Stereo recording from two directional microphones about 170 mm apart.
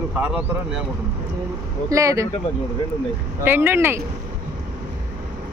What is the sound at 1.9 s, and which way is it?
Speech, 20° right (ahead or behind).